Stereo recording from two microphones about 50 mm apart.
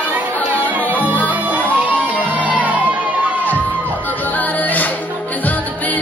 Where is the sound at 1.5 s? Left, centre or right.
Right.